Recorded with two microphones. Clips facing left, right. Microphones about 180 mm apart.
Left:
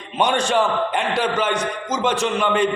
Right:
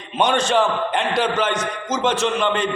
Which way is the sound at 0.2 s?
10° left (ahead or behind).